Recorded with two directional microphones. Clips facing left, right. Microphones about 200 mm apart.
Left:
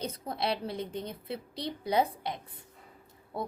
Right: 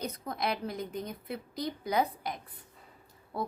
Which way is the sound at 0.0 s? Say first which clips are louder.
Left 1 dB; 30° left (ahead or behind).